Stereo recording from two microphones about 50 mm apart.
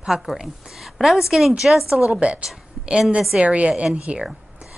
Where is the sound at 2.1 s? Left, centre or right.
Right.